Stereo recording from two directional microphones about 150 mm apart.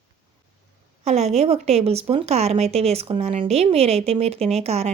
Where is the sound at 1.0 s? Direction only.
45° right (ahead or behind).